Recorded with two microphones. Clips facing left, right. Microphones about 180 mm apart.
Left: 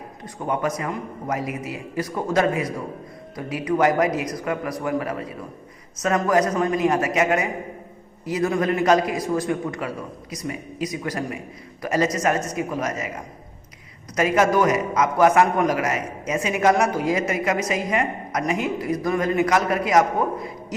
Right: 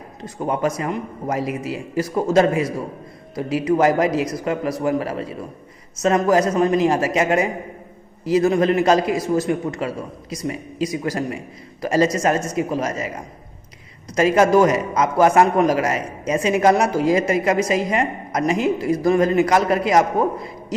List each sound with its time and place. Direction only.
0.4 s a man's voice: 30° right (ahead or behind)
14.2 s a man's voice: 30° right (ahead or behind)